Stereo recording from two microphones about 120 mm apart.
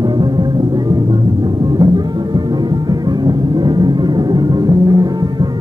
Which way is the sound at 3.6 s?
35° right (ahead or behind).